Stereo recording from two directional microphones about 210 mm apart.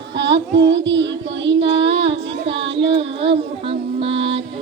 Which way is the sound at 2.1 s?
60° right (ahead or behind).